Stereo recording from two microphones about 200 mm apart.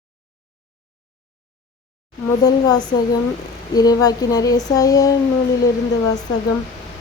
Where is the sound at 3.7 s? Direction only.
20° left (ahead or behind).